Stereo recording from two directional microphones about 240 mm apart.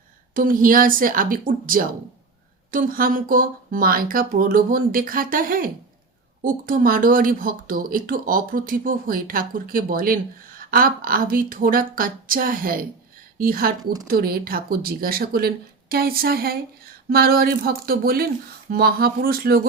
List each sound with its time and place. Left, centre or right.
0.3 s speech: right